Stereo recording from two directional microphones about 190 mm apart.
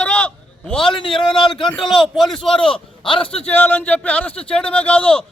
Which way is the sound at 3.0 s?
25° left (ahead or behind).